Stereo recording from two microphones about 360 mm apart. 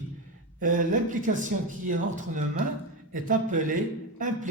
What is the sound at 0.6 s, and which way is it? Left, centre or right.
Speech, right.